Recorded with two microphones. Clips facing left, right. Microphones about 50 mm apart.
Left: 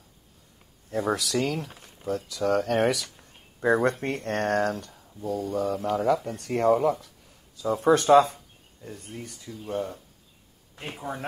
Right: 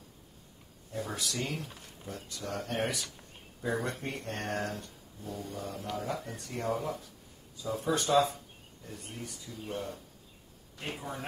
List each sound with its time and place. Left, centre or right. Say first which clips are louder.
1.1 s speech: left 10 dB; left
1.4 s speech: left 8 dB; left
5.5 s speech: left 12 dB; left
10.8 s speech: left 4 dB; left